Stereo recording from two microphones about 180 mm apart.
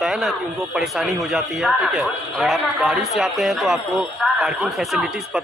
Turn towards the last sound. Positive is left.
turn(degrees=0)  # may be behind; listen again after turning